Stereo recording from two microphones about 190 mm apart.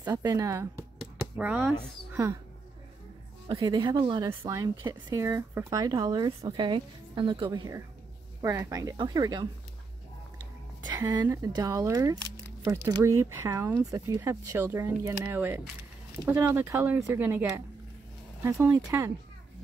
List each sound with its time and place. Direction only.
0.0 s speech: 20° right (ahead or behind)
3.5 s speech: 20° right (ahead or behind)
10.9 s speech: 20° right (ahead or behind)